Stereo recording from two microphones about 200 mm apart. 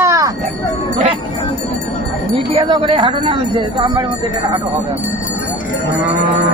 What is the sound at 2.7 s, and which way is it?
Speech, 25° right (ahead or behind).